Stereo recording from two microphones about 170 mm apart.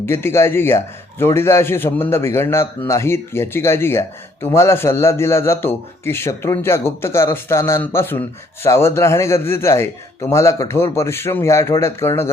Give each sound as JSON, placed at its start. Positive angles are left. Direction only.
{"t": 0.0, "sound": "a man's voice", "side_deg": 15}